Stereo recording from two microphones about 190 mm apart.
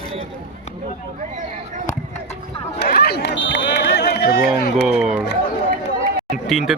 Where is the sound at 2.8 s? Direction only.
60° left (ahead or behind).